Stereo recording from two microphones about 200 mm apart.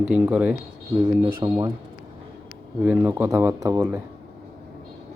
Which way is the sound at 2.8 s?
10° right (ahead or behind).